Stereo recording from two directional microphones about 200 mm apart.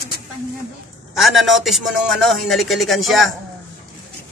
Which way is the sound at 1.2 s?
Centre (ahead or behind).